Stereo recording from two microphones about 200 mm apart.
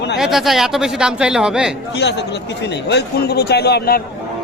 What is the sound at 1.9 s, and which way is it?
Speech, 60° left (ahead or behind).